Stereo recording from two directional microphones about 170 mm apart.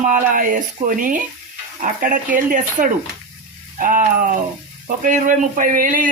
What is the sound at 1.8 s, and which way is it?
Speech, 55° right (ahead or behind).